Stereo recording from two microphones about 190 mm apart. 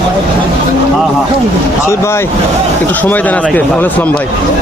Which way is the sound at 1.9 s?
15° left (ahead or behind).